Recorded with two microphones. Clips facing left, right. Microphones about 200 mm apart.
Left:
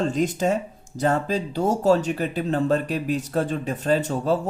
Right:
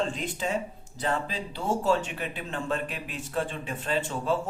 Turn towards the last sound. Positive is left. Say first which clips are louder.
# left 7 dB
turn(degrees=40)  # may be behind; listen again after turning